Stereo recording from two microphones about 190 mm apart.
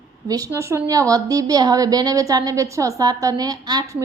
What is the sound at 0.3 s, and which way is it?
A woman's voice, 20° right (ahead or behind).